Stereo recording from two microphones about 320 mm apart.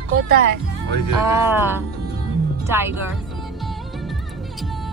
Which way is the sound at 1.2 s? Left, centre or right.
Centre.